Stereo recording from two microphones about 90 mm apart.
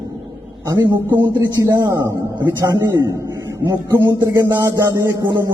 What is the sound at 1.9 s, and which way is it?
A man's voice, 40° right (ahead or behind).